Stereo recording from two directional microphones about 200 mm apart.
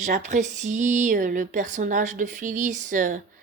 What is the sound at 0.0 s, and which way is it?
A woman's voice, 40° right (ahead or behind).